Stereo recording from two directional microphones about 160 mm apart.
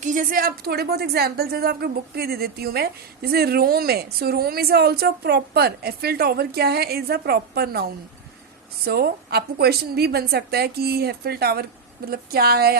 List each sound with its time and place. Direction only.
0.0 s a woman's voice: 55° right (ahead or behind); by 12.7 s 75° right (ahead or behind)